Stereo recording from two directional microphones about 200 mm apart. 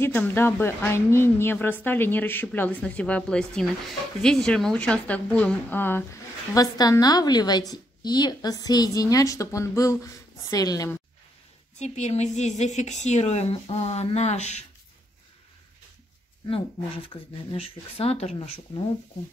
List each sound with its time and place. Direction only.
0.0 s a woman's voice: 10° left (ahead or behind)
11.8 s a woman's voice: 35° left (ahead or behind)
17.1 s a woman's voice: 30° left (ahead or behind)